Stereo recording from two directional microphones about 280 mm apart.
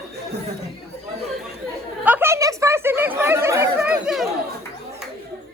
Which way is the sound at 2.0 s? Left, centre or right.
Centre.